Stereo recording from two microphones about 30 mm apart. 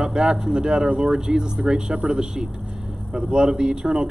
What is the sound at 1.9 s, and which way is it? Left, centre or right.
Speech, right.